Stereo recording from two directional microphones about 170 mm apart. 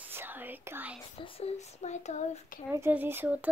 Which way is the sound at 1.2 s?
35° left (ahead or behind).